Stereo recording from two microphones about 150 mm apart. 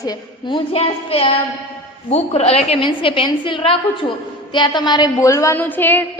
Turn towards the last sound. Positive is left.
turn(degrees=10)  # may be behind; listen again after turning